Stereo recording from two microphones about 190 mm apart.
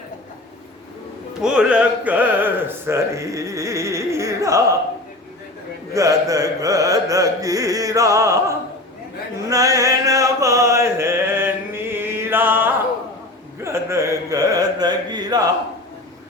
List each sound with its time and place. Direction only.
1.4 s speech: 5° right (ahead or behind)
5.9 s speech: 15° right (ahead or behind)
9.5 s chant: 15° right (ahead or behind)
13.6 s carnatic music: 15° right (ahead or behind)